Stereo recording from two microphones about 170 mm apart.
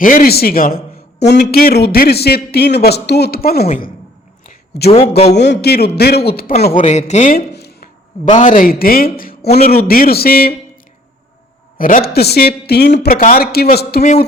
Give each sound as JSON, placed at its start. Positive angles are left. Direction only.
{"t": 0.0, "sound": "speech", "side_deg": 55}
{"t": 4.9, "sound": "a man's voice", "side_deg": 40}
{"t": 5.4, "sound": "speech", "side_deg": 80}
{"t": 6.8, "sound": "speech", "side_deg": 40}
{"t": 7.3, "sound": "a sound", "side_deg": 70}
{"t": 8.3, "sound": "speech", "side_deg": 45}
{"t": 9.1, "sound": "a sound", "side_deg": 55}
{"t": 9.6, "sound": "speech", "side_deg": 60}
{"t": 11.8, "sound": "speech", "side_deg": 55}
{"t": 13.0, "sound": "speech", "side_deg": 55}